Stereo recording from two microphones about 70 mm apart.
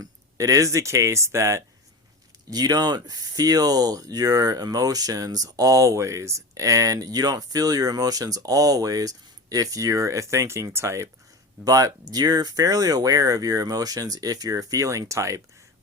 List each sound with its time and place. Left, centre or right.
0.0 s speech: right
2.5 s speech: right
11.6 s speech: right